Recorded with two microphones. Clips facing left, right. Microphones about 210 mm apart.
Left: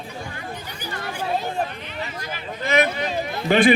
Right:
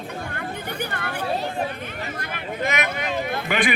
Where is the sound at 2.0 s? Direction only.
60° right (ahead or behind).